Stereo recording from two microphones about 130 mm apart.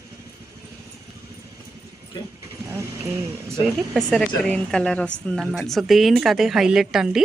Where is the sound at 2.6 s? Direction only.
20° right (ahead or behind).